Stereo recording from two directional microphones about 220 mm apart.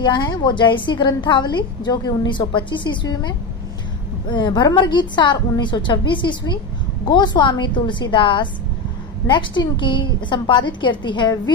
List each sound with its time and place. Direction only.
0.0 s a woman's voice: 20° left (ahead or behind)